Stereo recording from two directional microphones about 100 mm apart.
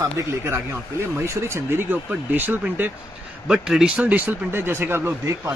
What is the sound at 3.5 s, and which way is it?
Speech, 5° right (ahead or behind).